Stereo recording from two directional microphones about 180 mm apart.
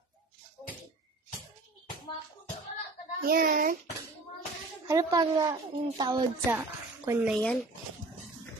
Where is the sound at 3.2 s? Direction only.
55° right (ahead or behind).